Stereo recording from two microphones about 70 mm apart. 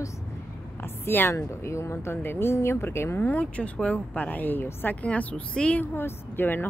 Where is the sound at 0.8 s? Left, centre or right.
Left.